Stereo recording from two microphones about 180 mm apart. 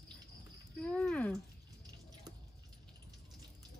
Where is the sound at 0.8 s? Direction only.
5° left (ahead or behind).